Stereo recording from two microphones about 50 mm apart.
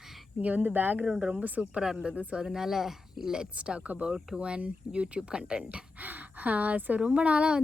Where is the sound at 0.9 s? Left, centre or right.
Centre.